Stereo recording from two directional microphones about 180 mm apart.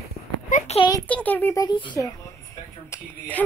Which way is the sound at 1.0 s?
10° left (ahead or behind).